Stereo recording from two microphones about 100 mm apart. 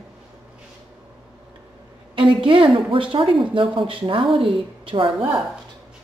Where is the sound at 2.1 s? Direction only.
60° right (ahead or behind).